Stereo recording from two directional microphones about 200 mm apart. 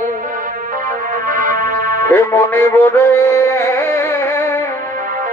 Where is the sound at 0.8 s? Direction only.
45° right (ahead or behind).